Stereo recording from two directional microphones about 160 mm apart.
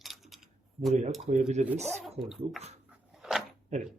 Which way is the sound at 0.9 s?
45° right (ahead or behind).